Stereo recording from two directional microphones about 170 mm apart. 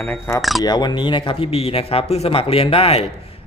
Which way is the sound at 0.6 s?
25° left (ahead or behind).